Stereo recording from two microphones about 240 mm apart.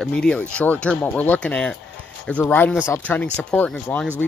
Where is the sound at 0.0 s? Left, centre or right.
Centre.